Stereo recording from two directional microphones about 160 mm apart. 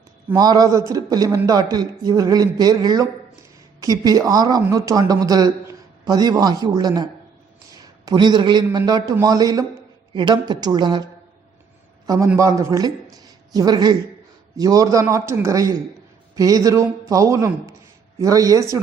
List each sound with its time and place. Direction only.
0.3 s a man's voice: 25° right (ahead or behind)